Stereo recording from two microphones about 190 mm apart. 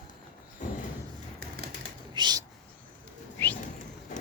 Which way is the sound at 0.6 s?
40° left (ahead or behind).